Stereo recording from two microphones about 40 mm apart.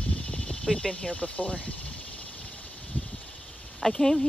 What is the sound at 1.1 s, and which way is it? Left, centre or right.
Speech, left.